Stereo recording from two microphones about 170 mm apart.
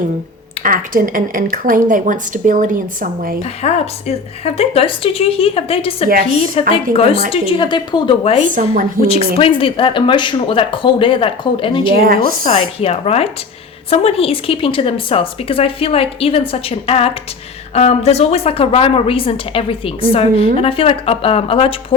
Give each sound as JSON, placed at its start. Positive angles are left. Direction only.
{"t": 0.6, "sound": "speech", "side_deg": -55}
{"t": 3.6, "sound": "a woman's voice", "side_deg": 40}
{"t": 8.5, "sound": "speech", "side_deg": -55}
{"t": 9.0, "sound": "a woman's voice", "side_deg": 35}
{"t": 11.9, "sound": "a woman's voice", "side_deg": -60}
{"t": 12.5, "sound": "a woman's voice", "side_deg": 35}